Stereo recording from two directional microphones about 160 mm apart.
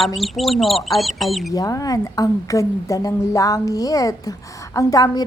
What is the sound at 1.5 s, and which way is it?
A woman's voice, 20° left (ahead or behind).